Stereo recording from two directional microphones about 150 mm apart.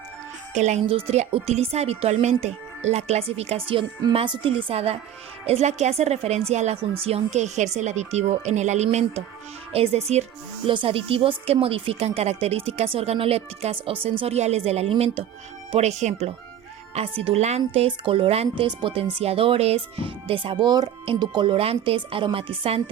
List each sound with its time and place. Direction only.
0.5 s a woman's voice: 50° right (ahead or behind)